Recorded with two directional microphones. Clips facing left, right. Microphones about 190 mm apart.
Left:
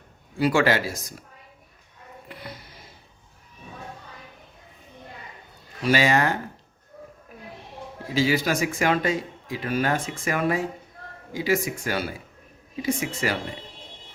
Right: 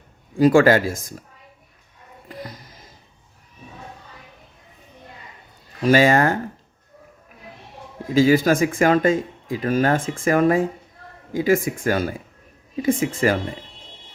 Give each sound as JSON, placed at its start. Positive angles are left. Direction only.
{"t": 0.3, "sound": "speech", "side_deg": -45}
{"t": 5.8, "sound": "speech", "side_deg": -45}
{"t": 8.1, "sound": "speech", "side_deg": -50}